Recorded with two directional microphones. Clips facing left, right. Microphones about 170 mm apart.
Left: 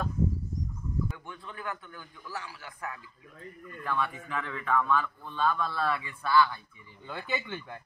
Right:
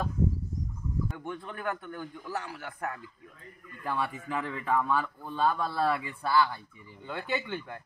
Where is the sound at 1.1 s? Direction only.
50° right (ahead or behind).